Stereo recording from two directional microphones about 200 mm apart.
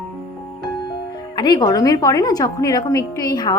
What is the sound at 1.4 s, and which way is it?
A woman's voice, 20° left (ahead or behind).